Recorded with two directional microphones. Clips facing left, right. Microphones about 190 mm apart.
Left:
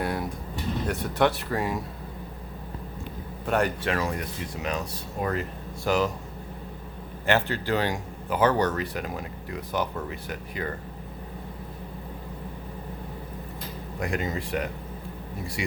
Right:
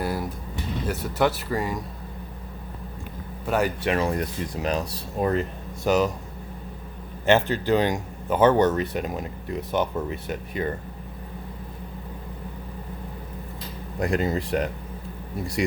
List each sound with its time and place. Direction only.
0.0 s vehicle: centre (ahead or behind)
0.9 s speech: centre (ahead or behind)
3.4 s speech: centre (ahead or behind)
3.8 s a man's voice: 25° right (ahead or behind)
7.3 s a man's voice: 20° right (ahead or behind)
14.0 s speech: 35° right (ahead or behind)